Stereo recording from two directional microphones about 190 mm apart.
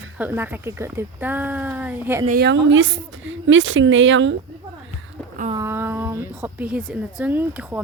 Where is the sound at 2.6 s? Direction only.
75° right (ahead or behind).